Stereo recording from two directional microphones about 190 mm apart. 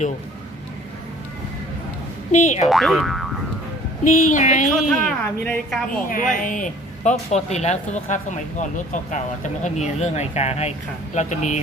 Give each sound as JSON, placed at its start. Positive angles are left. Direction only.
{"t": 2.3, "sound": "speech", "side_deg": 40}
{"t": 2.6, "sound": "a woman's voice", "side_deg": 0}
{"t": 4.3, "sound": "speech", "side_deg": 40}
{"t": 4.8, "sound": "a woman's voice", "side_deg": 0}
{"t": 6.1, "sound": "speech", "side_deg": 45}